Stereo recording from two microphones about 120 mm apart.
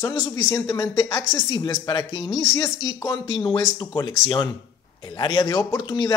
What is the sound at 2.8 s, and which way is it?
Speech, 35° left (ahead or behind).